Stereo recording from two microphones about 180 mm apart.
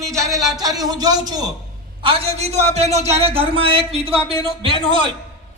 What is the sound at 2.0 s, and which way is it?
A man's voice, 30° right (ahead or behind).